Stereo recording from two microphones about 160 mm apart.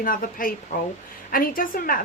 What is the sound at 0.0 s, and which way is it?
A woman's voice, 60° left (ahead or behind).